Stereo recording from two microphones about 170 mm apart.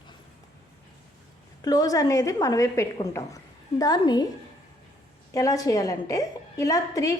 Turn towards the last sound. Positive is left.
turn(degrees=20)  # may be behind; listen again after turning